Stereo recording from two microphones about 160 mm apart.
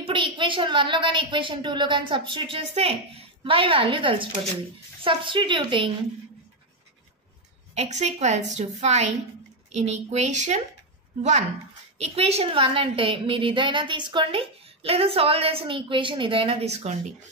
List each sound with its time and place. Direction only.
0.0 s a woman's voice: 30° right (ahead or behind)
7.7 s a woman's voice: 45° right (ahead or behind)
12.0 s a woman's voice: 40° right (ahead or behind)